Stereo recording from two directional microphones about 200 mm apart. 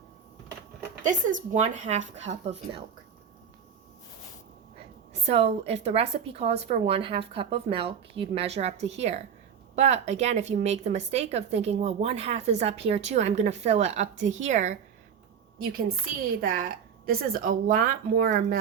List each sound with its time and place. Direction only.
1.0 s a woman's voice: 35° right (ahead or behind)
5.2 s a woman's voice: 30° right (ahead or behind)
16.4 s speech: 45° right (ahead or behind)